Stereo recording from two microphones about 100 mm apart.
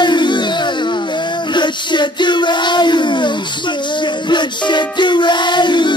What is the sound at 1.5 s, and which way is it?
Music, 50° left (ahead or behind).